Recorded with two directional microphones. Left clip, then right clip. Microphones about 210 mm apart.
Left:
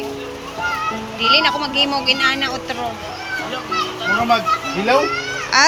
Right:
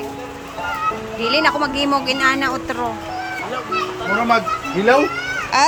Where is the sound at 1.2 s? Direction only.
20° right (ahead or behind).